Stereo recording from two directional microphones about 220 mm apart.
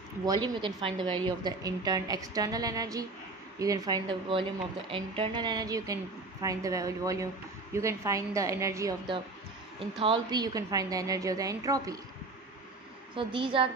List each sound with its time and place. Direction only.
0.2 s a woman's voice: 20° right (ahead or behind)
9.9 s a woman's voice: 20° right (ahead or behind)
13.1 s a woman's voice: 25° right (ahead or behind)